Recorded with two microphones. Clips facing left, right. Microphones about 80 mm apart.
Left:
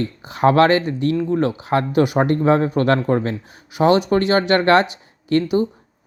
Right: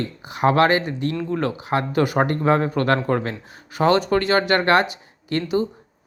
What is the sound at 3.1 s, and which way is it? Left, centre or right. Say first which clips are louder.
Speech: left 3 dB; right.